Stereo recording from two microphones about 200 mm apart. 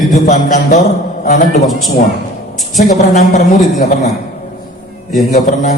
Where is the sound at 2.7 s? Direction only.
40° left (ahead or behind).